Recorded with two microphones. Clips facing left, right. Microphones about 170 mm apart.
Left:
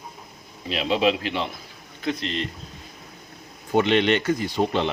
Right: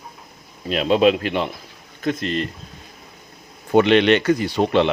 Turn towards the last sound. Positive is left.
turn(degrees=-75)  # may be behind; listen again after turning